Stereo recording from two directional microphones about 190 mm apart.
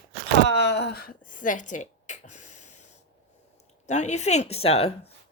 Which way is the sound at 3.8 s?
40° left (ahead or behind).